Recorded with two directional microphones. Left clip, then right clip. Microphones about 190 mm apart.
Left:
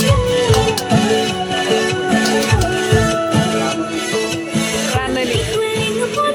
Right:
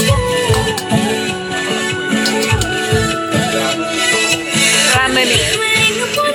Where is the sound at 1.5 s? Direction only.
35° left (ahead or behind).